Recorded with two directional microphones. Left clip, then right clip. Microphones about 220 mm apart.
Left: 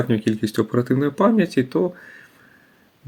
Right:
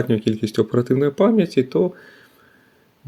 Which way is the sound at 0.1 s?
15° right (ahead or behind).